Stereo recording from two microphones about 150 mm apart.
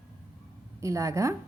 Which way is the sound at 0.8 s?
20° right (ahead or behind).